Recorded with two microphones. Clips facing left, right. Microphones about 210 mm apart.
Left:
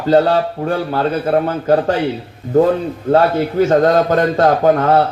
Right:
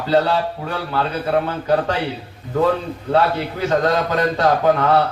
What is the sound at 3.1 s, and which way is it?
A man's voice, 45° left (ahead or behind).